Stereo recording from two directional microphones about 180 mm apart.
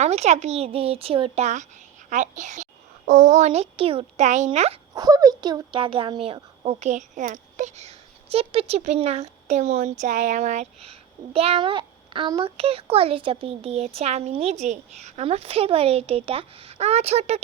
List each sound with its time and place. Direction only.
0.0 s a woman's voice: 40° right (ahead or behind)
4.9 s a woman's voice: 20° right (ahead or behind); by 17.4 s 35° right (ahead or behind)